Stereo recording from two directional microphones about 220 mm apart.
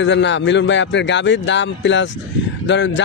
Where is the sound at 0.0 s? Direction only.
55° left (ahead or behind).